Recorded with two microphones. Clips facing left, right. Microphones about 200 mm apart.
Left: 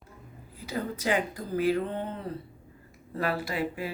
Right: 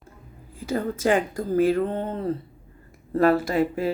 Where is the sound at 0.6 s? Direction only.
45° right (ahead or behind).